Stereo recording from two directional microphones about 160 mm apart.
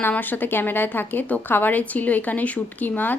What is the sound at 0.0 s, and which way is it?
A woman's voice, 10° left (ahead or behind).